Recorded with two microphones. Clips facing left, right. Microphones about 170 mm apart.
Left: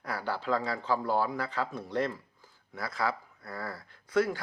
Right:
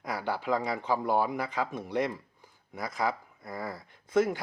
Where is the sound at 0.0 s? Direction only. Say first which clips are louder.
Right 2 dB; 15° right (ahead or behind).